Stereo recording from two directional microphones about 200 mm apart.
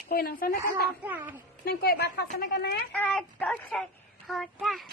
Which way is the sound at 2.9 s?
5° left (ahead or behind).